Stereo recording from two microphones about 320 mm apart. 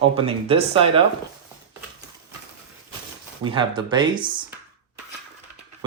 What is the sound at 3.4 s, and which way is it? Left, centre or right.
Speech, centre.